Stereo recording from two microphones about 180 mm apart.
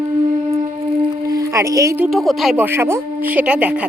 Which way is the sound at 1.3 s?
20° right (ahead or behind).